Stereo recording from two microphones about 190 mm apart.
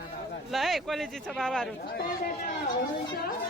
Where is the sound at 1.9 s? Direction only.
50° left (ahead or behind).